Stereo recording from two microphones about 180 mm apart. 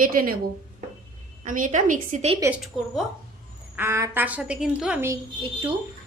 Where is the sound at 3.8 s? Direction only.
15° right (ahead or behind).